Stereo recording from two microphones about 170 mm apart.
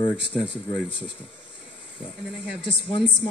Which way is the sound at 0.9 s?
30° left (ahead or behind).